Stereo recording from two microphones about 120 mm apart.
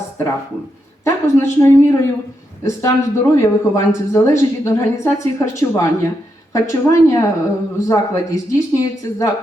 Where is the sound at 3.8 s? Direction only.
25° left (ahead or behind).